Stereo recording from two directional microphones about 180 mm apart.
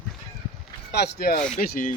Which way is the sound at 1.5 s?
50° left (ahead or behind).